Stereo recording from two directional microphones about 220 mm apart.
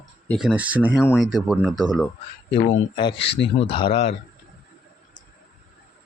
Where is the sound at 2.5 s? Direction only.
25° left (ahead or behind).